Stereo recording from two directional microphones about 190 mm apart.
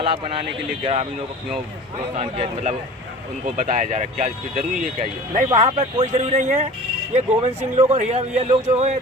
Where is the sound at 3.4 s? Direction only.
45° right (ahead or behind).